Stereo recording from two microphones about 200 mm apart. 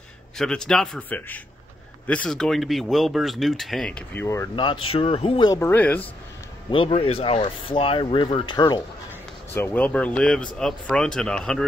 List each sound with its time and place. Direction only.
0.4 s speech: 5° left (ahead or behind)
6.7 s speech: 25° left (ahead or behind)
9.5 s speech: 10° left (ahead or behind)